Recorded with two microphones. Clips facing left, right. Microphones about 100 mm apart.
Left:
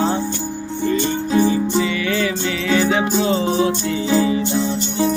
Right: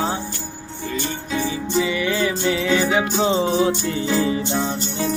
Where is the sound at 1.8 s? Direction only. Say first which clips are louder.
Left 1 dB; 20° right (ahead or behind).